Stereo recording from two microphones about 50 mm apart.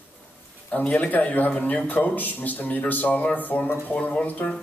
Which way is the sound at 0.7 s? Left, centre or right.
Left.